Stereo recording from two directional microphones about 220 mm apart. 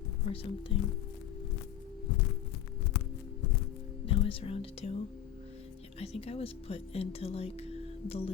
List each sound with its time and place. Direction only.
0.3 s speech: 30° left (ahead or behind)
4.0 s speech: 25° left (ahead or behind)
6.0 s speech: 25° left (ahead or behind)